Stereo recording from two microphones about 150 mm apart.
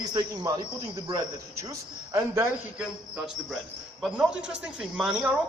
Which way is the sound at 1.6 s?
20° right (ahead or behind).